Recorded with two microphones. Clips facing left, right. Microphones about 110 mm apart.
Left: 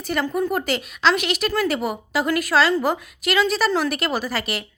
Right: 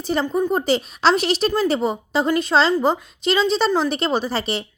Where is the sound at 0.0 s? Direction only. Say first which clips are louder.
Right 2 dB; 30° right (ahead or behind).